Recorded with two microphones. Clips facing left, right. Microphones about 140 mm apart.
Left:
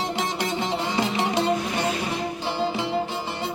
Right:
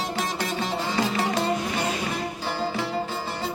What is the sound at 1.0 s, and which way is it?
Music, 25° left (ahead or behind).